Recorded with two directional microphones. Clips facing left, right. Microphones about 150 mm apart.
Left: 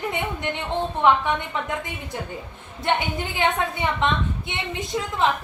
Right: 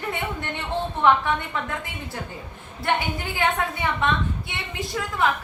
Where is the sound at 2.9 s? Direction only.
20° left (ahead or behind).